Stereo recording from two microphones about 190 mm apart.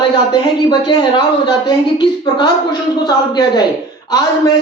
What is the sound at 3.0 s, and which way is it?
Speech, 20° left (ahead or behind).